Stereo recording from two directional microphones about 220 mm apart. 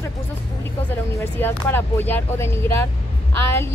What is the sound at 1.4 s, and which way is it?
Speech, 10° left (ahead or behind).